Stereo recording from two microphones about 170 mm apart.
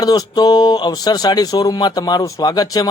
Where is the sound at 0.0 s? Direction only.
20° left (ahead or behind).